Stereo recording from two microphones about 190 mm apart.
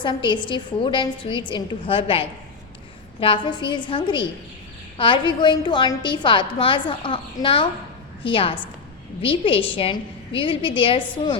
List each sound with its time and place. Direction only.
0.0 s a woman's voice: 25° left (ahead or behind)